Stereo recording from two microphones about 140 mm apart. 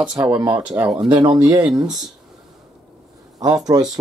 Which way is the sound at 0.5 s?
10° right (ahead or behind).